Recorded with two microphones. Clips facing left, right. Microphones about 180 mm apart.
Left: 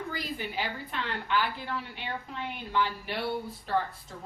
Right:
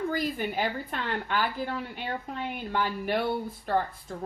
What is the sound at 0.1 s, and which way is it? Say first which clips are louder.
A woman's voice: right 6 dB; 50° right (ahead or behind).